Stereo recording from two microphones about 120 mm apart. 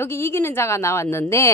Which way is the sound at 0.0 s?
20° left (ahead or behind).